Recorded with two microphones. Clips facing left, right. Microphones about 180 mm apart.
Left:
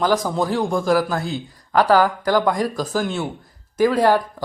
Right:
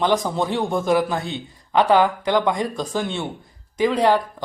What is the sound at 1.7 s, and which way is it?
Speech, 20° right (ahead or behind).